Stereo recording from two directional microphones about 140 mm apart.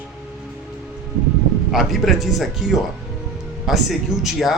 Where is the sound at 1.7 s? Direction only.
Centre (ahead or behind).